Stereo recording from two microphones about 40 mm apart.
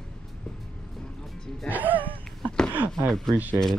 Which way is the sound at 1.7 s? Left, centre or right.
Right.